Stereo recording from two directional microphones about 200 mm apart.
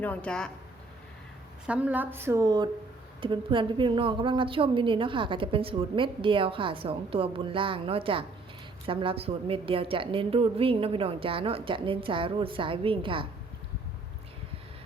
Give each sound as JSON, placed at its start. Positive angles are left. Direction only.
{"t": 0.0, "sound": "speech", "side_deg": 5}
{"t": 1.6, "sound": "a woman's voice", "side_deg": -5}